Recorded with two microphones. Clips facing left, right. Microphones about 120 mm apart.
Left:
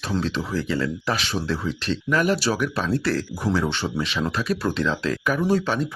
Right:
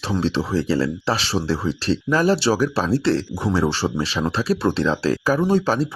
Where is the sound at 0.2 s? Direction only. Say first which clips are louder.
Right 7 dB; 30° right (ahead or behind).